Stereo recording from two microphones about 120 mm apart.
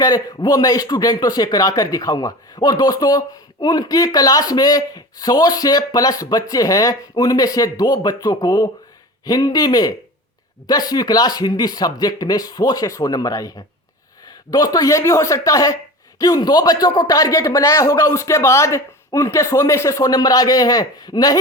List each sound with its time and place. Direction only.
0.0 s speech: 30° left (ahead or behind)